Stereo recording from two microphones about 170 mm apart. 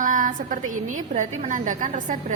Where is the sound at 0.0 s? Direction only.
50° right (ahead or behind).